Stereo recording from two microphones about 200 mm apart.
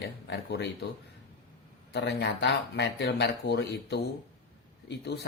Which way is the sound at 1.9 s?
60° left (ahead or behind).